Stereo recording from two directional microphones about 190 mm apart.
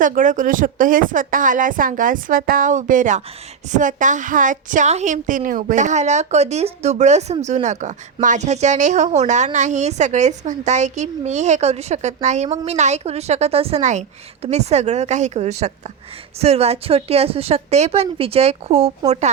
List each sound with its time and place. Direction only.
0.0 s a woman's voice: 45° right (ahead or behind)